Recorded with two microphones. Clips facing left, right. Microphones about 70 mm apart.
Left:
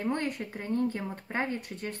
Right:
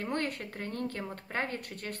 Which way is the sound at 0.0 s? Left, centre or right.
Centre.